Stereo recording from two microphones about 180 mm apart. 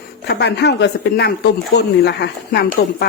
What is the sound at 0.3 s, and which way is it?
Speech, 65° left (ahead or behind).